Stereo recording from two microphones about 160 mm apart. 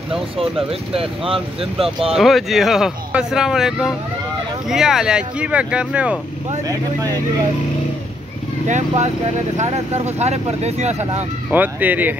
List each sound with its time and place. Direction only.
0.7 s speech: 35° right (ahead or behind)
2.1 s speech: centre (ahead or behind)
8.6 s speech: 45° right (ahead or behind)
11.5 s speech: 10° right (ahead or behind)